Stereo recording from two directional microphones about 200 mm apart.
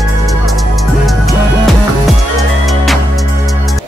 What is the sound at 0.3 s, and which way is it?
Music, centre (ahead or behind).